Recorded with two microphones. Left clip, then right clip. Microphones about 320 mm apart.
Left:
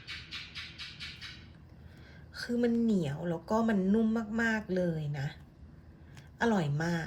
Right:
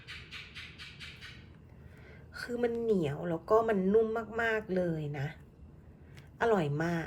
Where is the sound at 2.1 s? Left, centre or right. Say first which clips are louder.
Left 1 dB; centre.